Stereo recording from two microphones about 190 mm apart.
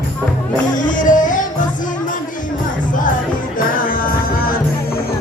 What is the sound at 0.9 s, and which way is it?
Music, 45° left (ahead or behind).